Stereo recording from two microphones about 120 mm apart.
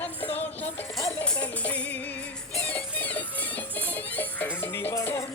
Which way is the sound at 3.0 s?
15° left (ahead or behind).